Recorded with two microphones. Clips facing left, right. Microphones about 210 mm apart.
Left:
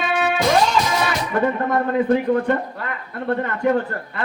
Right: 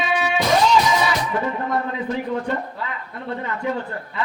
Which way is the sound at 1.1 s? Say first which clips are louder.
Left 3 dB; 55° left (ahead or behind).